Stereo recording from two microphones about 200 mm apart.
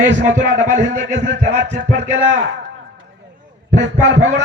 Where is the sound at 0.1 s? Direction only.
65° right (ahead or behind).